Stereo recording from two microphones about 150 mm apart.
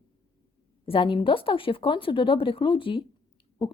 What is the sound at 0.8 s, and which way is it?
A woman's voice, 35° left (ahead or behind).